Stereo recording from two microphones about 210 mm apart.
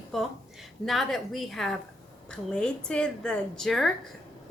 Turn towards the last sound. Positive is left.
turn(degrees=0)  # may be behind; listen again after turning